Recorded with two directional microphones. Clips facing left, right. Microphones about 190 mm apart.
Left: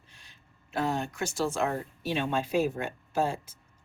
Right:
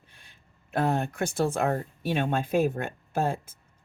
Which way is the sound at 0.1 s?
55° right (ahead or behind).